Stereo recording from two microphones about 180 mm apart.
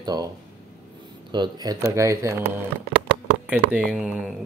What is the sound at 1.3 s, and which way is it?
Speech, 25° right (ahead or behind).